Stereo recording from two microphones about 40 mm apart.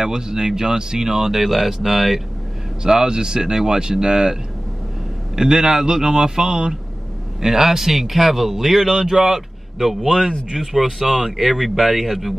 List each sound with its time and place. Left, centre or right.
0.0 s speech: centre
2.8 s speech: centre